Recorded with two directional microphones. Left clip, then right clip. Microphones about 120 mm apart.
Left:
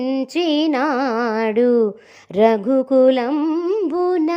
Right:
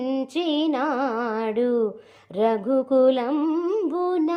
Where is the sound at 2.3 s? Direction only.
35° left (ahead or behind); by 3.8 s 20° left (ahead or behind).